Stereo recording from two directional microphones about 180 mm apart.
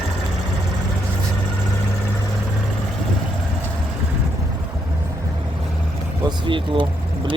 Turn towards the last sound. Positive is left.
turn(degrees=-25)  # may be behind; listen again after turning